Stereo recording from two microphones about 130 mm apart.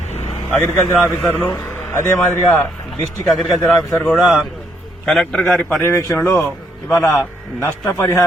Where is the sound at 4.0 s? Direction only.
Centre (ahead or behind).